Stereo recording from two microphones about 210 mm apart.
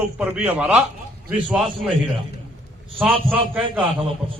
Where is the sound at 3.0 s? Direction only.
25° right (ahead or behind).